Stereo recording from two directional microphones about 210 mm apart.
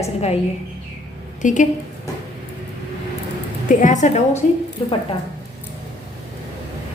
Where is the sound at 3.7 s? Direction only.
35° left (ahead or behind).